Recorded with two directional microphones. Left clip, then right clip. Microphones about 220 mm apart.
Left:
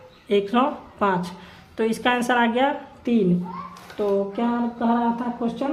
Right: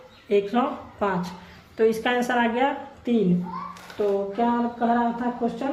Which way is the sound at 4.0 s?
45° left (ahead or behind).